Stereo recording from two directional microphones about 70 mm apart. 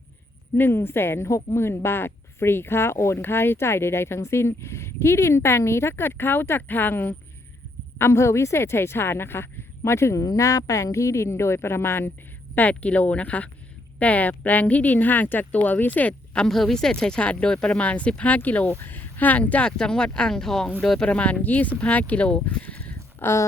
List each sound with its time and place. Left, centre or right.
0.5 s a woman's voice: left
12.5 s speech: left; by 21.1 s centre
21.1 s speech: centre
23.2 s a woman's voice: left